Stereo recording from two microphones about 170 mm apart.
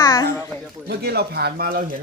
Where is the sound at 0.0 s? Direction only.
20° left (ahead or behind).